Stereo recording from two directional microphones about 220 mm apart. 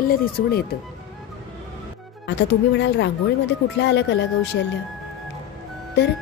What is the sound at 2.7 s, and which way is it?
Speech, 50° left (ahead or behind).